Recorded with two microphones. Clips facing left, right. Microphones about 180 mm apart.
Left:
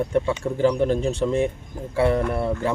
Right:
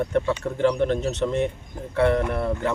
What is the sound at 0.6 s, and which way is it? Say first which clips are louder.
Speech: left 2 dB; 5° left (ahead or behind).